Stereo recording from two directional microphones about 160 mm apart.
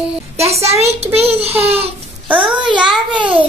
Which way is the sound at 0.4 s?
40° right (ahead or behind).